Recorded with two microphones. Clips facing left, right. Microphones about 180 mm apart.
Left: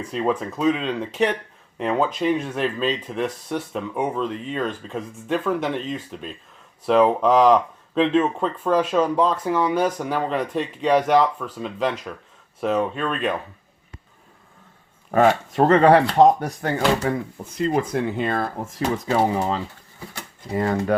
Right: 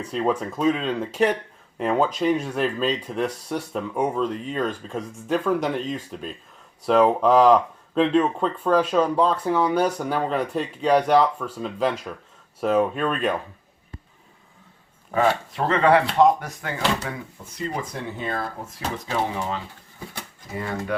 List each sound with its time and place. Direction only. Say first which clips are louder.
0.0 s speech: even; centre (ahead or behind)
15.1 s speech: left 4 dB; 50° left (ahead or behind)
17.6 s speech: left 8 dB; 60° left (ahead or behind)
19.3 s speech: left 5 dB; 40° left (ahead or behind)